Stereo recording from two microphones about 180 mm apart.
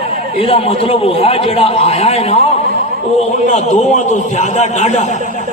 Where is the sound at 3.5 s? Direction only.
40° left (ahead or behind).